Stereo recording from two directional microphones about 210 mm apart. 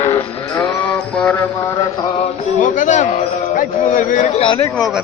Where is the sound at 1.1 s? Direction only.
5° left (ahead or behind).